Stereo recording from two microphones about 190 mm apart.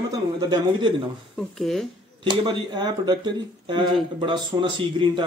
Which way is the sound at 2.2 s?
25° right (ahead or behind).